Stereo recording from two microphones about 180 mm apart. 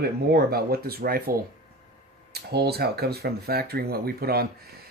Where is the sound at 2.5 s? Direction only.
60° right (ahead or behind).